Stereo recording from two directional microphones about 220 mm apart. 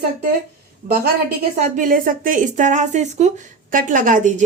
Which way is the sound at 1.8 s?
40° right (ahead or behind).